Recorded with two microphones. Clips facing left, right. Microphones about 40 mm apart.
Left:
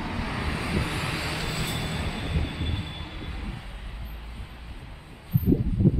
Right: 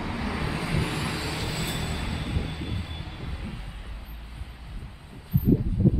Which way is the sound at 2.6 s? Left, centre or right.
Left.